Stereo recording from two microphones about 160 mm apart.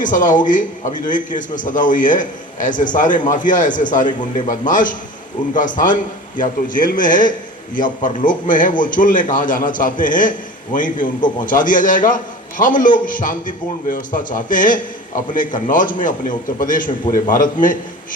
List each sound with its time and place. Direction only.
0.0 s a man's voice: 55° left (ahead or behind)